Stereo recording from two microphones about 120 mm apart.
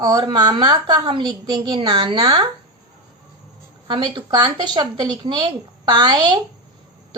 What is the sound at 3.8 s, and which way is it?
A woman's voice, 45° right (ahead or behind).